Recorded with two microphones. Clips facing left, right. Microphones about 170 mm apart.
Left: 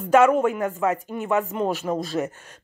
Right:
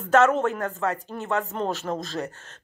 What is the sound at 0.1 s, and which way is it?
Speech, 10° left (ahead or behind).